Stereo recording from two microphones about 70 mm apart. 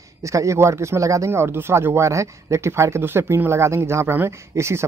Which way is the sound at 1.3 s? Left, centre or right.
Right.